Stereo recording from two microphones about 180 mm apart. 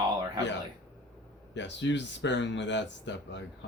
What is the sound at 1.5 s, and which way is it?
Speech, 80° left.